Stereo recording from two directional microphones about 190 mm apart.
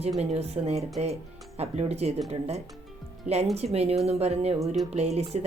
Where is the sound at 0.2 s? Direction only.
35° right (ahead or behind).